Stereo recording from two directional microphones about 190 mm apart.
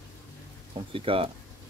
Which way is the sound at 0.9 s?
30° right (ahead or behind).